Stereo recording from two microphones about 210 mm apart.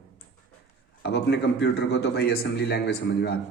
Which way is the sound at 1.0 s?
55° left (ahead or behind).